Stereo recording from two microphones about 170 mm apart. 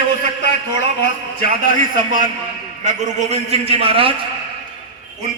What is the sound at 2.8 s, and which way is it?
A man's voice, 40° right (ahead or behind).